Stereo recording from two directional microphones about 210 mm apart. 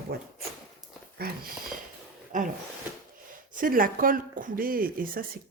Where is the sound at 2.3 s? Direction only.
35° right (ahead or behind).